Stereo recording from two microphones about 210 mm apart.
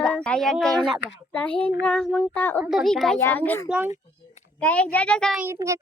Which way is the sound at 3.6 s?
5° right (ahead or behind).